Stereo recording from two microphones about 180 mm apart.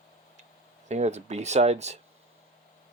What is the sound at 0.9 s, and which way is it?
Speech, 40° right (ahead or behind).